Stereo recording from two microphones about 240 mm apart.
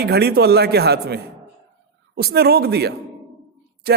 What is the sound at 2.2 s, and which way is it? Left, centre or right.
A man's voice, right.